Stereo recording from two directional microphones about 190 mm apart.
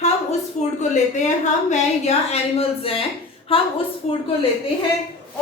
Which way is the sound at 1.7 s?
35° left (ahead or behind).